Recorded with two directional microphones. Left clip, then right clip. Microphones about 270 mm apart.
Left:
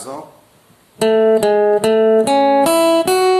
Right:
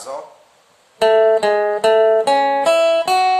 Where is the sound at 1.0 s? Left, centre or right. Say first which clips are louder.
Even; left.